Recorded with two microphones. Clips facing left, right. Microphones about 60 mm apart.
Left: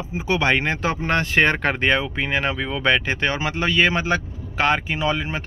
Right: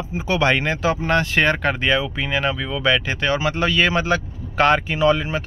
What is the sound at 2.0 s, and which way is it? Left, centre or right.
Speech, left.